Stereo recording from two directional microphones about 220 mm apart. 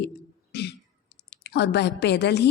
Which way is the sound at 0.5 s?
50° left (ahead or behind).